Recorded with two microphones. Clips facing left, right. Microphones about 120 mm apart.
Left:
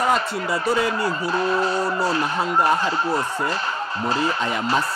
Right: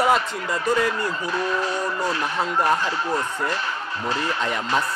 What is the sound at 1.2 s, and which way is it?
Speech, 35° left (ahead or behind).